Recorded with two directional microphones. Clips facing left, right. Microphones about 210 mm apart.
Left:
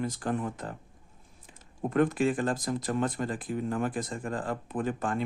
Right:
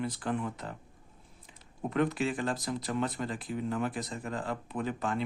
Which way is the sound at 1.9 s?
50° left (ahead or behind).